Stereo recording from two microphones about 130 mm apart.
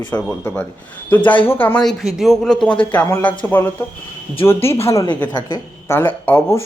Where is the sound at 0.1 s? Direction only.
10° left (ahead or behind).